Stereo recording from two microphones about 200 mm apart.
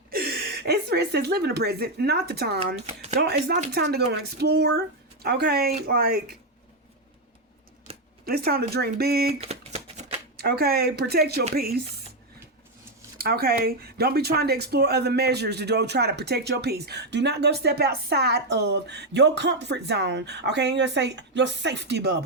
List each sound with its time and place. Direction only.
0.1 s speech: 50° right (ahead or behind)
8.2 s speech: 50° right (ahead or behind)
9.4 s a sound: 30° right (ahead or behind)
10.3 s speech: 50° right (ahead or behind)
13.1 s speech: 50° right (ahead or behind)